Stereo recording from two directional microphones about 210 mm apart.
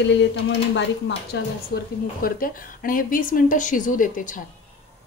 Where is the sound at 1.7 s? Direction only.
45° left (ahead or behind).